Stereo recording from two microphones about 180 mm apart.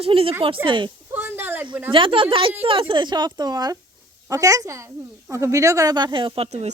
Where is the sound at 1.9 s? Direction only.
30° right (ahead or behind).